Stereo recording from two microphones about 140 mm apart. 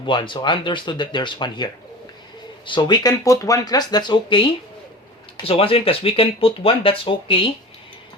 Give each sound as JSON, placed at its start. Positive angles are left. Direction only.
{"t": 0.0, "sound": "speech", "side_deg": 35}